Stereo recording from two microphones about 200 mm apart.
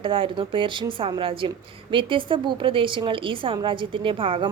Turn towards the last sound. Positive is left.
turn(degrees=-25)  # may be behind; listen again after turning